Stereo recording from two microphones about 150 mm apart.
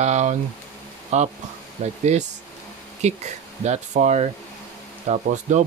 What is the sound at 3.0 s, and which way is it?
Speech, 50° right (ahead or behind).